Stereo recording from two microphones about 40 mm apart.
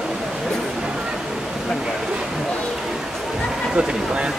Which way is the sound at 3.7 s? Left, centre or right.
Right.